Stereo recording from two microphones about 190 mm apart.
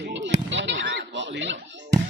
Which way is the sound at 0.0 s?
70° right (ahead or behind).